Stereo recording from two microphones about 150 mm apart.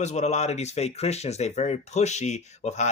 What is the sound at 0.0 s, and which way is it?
Speech, 50° left (ahead or behind).